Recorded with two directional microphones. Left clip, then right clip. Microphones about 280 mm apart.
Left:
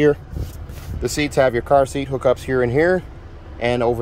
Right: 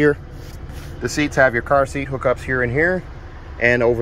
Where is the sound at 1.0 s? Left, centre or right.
Centre.